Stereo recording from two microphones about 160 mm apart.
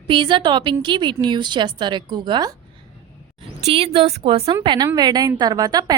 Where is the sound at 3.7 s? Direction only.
40° right (ahead or behind).